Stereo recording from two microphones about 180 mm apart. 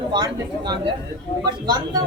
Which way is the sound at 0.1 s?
25° right (ahead or behind).